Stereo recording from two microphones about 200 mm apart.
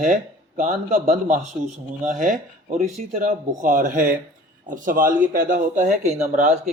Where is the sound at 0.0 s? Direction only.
40° right (ahead or behind).